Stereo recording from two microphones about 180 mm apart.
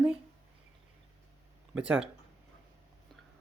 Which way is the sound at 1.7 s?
5° right (ahead or behind).